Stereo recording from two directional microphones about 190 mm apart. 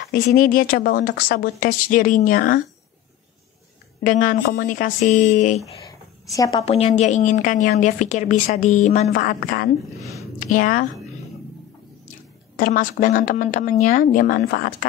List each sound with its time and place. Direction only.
0.0 s speech: 55° left (ahead or behind)
4.0 s a woman's voice: 45° left (ahead or behind)
6.3 s a woman's voice: 20° left (ahead or behind)
6.6 s a woman's voice: 30° left (ahead or behind)
12.5 s speech: 45° left (ahead or behind)